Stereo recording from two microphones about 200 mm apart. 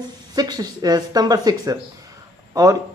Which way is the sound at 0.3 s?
20° right (ahead or behind).